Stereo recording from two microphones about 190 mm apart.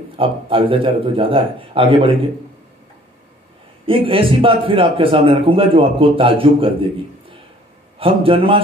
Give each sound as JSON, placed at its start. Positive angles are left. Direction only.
{"t": 0.1, "sound": "a man's voice", "side_deg": -25}
{"t": 3.8, "sound": "a man's voice", "side_deg": -30}
{"t": 8.0, "sound": "a man's voice", "side_deg": -25}